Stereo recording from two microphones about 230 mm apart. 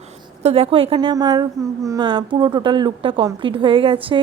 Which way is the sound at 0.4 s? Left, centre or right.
Right.